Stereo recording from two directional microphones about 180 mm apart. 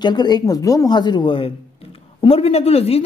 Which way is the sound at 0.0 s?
25° left (ahead or behind).